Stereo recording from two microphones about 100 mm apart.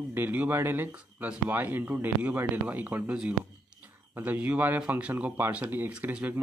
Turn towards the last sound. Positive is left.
turn(degrees=-20)  # may be behind; listen again after turning